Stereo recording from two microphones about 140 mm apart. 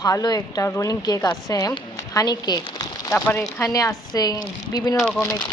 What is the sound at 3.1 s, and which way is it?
A woman's voice, 15° left (ahead or behind).